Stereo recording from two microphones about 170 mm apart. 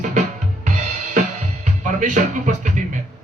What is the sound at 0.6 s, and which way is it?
Drum kit, 50° right (ahead or behind).